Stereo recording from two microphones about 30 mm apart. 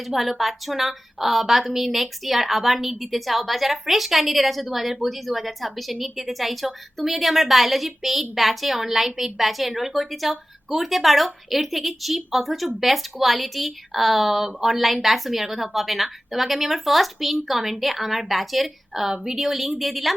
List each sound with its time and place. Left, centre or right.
0.0 s a woman's voice: centre
19.1 s a woman's voice: centre
19.4 s a woman's voice: centre